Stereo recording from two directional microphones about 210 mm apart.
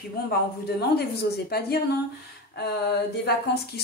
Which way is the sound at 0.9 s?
50° left (ahead or behind).